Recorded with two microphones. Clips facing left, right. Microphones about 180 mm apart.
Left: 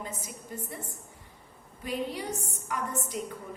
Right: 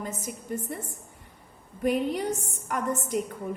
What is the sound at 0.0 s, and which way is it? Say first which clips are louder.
Speech: right 5 dB; 50° right (ahead or behind).